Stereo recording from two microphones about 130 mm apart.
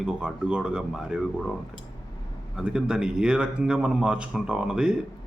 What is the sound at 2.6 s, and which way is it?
Speech, 5° right (ahead or behind).